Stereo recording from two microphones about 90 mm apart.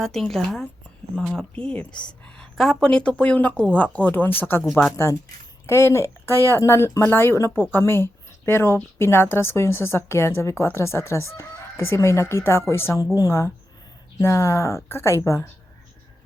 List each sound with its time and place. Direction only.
0.0 s speech: 5° left (ahead or behind)
3.5 s speech: 20° right (ahead or behind)
3.9 s speech: 20° left (ahead or behind)
5.6 s speech: 35° left (ahead or behind)